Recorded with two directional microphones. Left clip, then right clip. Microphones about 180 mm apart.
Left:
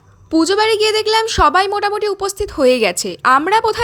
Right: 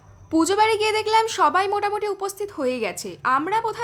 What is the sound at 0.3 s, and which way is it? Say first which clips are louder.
A woman's voice: left 5 dB; 20° left (ahead or behind).